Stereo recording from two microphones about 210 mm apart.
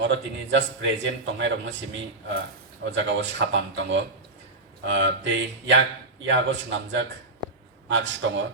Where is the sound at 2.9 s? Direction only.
60° right (ahead or behind).